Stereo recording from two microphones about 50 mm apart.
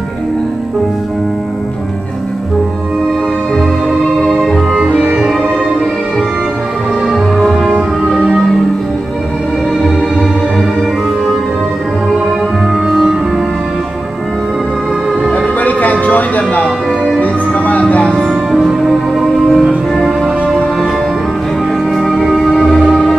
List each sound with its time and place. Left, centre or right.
4.2 s music: centre
7.4 s music: centre
12.8 s music: centre
15.3 s music: left
18.5 s music: centre
21.9 s music: centre